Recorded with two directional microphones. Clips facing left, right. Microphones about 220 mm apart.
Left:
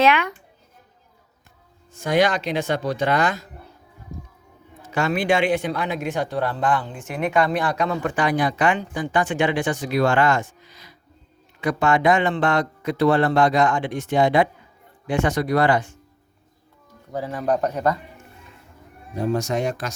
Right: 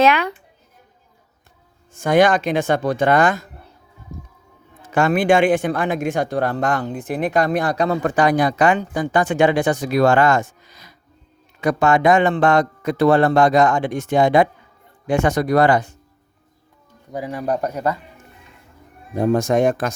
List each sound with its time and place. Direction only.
0.0 s speech: 40° right (ahead or behind)
1.9 s a man's voice: 50° right (ahead or behind)
4.8 s a man's voice: 50° right (ahead or behind)
17.1 s speech: 15° right (ahead or behind)
19.1 s a man's voice: 50° right (ahead or behind)